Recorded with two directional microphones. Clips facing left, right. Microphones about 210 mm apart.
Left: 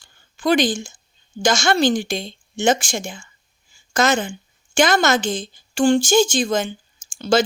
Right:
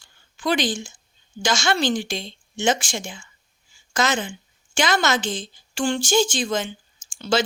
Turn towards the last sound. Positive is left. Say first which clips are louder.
# left 4 dB
turn(degrees=40)  # may be behind; listen again after turning